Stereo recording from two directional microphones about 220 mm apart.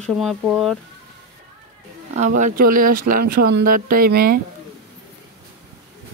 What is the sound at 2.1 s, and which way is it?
Speech, 35° right (ahead or behind).